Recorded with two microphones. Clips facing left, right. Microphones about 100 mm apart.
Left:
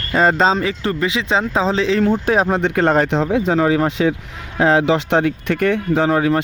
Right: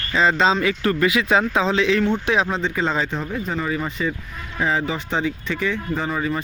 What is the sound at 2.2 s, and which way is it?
Speech, 45° left (ahead or behind).